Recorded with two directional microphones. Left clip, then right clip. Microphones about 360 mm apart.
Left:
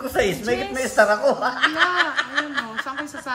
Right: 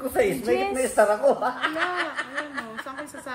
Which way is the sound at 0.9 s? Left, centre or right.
Left.